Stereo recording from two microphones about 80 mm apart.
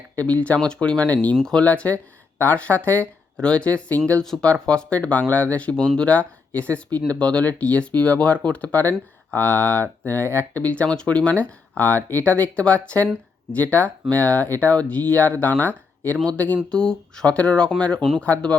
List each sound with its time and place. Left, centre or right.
0.2 s speech: centre
1.4 s speech: centre
1.6 s speech: centre